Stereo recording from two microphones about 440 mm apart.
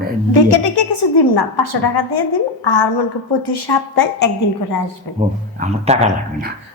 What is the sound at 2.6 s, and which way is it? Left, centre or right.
A woman's voice, left.